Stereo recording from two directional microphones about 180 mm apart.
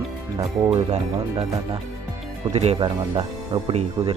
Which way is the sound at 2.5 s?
35° right (ahead or behind).